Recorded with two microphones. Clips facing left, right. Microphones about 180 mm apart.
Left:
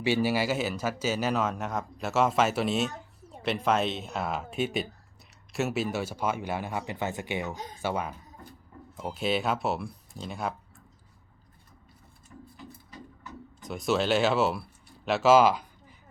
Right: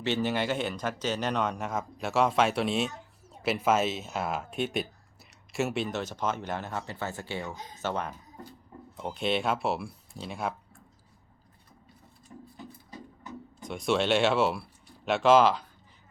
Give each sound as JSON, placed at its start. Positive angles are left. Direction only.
{"t": 0.0, "sound": "speech", "side_deg": 10}
{"t": 12.3, "sound": "wood", "side_deg": -30}
{"t": 13.6, "sound": "speech", "side_deg": 0}